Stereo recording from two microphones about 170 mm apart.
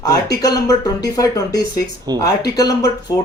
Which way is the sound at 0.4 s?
20° left (ahead or behind).